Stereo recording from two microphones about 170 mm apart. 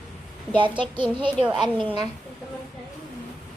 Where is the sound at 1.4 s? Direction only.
Centre (ahead or behind).